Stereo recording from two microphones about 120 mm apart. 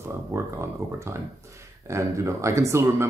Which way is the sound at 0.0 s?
25° right (ahead or behind).